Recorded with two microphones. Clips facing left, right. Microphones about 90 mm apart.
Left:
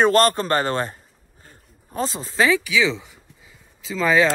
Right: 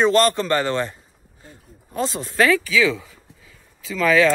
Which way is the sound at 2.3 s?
15° left (ahead or behind).